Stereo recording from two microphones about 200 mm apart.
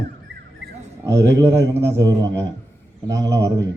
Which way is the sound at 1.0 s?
15° right (ahead or behind).